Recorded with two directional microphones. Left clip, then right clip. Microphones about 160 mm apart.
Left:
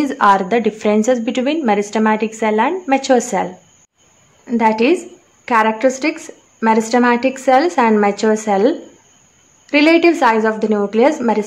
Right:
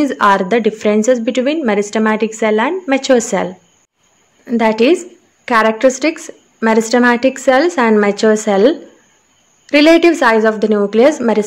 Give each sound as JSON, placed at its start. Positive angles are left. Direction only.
{"t": 0.0, "sound": "a woman's voice", "side_deg": -15}
{"t": 4.5, "sound": "a woman's voice", "side_deg": -20}